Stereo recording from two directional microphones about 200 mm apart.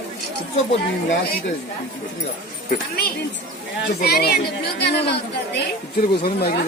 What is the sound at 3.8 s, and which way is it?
A man's voice, 50° left (ahead or behind).